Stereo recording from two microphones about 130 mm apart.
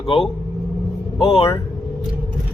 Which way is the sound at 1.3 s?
50° left (ahead or behind).